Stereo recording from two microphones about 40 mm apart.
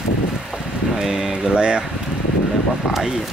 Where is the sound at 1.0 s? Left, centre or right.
Centre.